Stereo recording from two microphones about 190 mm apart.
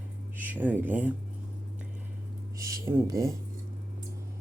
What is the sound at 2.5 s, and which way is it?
Speech, 15° right (ahead or behind).